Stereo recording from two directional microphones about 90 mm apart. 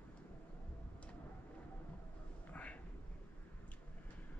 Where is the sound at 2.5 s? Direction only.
15° left (ahead or behind).